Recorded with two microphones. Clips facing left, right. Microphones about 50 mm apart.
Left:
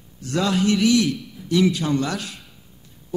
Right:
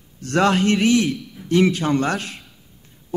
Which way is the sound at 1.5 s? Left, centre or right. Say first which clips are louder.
Right 2 dB; right.